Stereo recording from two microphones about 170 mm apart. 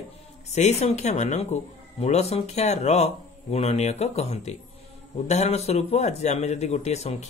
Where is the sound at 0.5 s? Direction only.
40° left (ahead or behind).